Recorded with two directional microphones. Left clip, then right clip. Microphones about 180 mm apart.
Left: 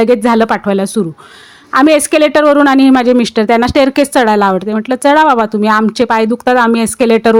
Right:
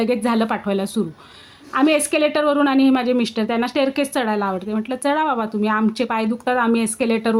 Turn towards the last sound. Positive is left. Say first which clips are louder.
# left 11 dB
turn(degrees=40)  # may be behind; listen again after turning